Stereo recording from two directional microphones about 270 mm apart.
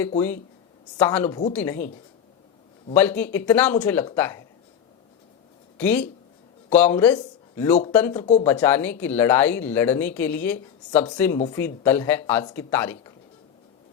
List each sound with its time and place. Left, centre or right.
0.9 s speech: centre
2.9 s speech: centre
5.7 s speech: centre
8.2 s speech: left
8.4 s speech: centre